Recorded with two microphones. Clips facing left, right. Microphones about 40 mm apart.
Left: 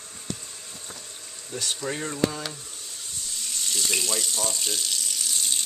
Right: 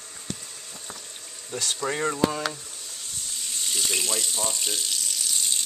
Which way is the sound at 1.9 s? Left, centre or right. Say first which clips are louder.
Right 8 dB; right.